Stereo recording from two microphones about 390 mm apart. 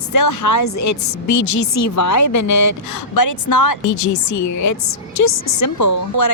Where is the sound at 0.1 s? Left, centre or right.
Left.